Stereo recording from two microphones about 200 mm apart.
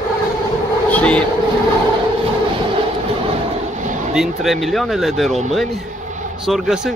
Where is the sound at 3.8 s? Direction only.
40° right (ahead or behind).